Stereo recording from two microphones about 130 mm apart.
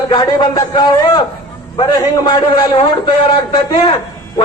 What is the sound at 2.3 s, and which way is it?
A man's voice, 30° left (ahead or behind).